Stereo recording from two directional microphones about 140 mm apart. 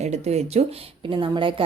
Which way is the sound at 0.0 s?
55° right (ahead or behind).